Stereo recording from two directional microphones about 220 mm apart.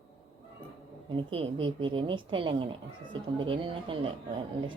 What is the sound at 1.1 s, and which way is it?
A woman's voice, 20° right (ahead or behind).